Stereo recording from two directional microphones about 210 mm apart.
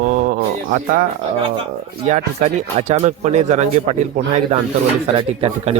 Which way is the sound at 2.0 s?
35° right (ahead or behind).